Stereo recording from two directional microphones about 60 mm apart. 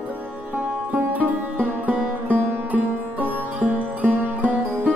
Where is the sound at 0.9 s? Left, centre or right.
Right.